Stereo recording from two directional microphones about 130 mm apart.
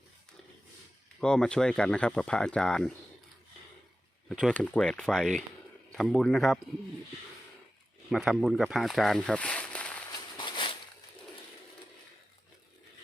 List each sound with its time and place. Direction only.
1.2 s speech: 5° left (ahead or behind)
4.3 s speech: 5° left (ahead or behind)
8.1 s speech: centre (ahead or behind)
10.3 s a sound: 40° left (ahead or behind)